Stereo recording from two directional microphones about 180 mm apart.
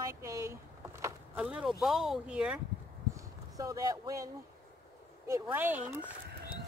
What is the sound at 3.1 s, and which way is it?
Clip-clop, 20° right (ahead or behind).